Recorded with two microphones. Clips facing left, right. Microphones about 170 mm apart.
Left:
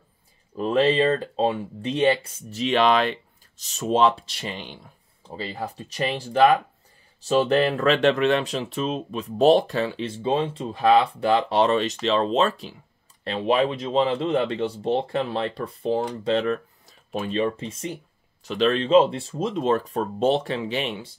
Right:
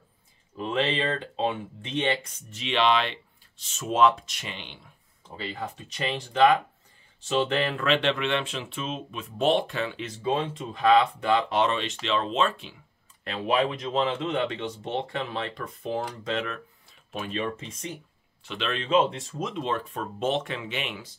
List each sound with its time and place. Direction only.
0.6 s speech: 35° left (ahead or behind)